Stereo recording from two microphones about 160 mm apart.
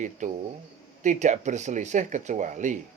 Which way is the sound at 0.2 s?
50° right (ahead or behind).